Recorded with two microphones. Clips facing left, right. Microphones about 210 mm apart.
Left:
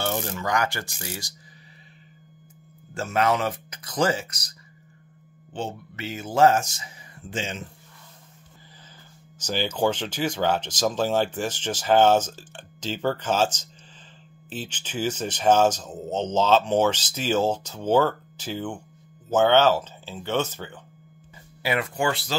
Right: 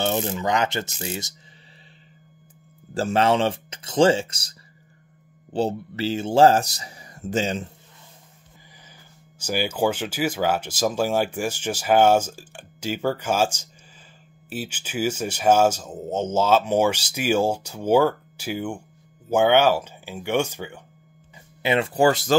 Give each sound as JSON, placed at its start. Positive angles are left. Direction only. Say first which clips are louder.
{"t": 0.0, "sound": "speech", "louder": "right 4 dB", "side_deg": -20}
{"t": 2.9, "sound": "speech", "louder": "right 3 dB", "side_deg": -30}
{"t": 9.4, "sound": "speech", "louder": "right 1 dB", "side_deg": -10}
{"t": 21.6, "sound": "speech", "louder": "right 6 dB", "side_deg": -30}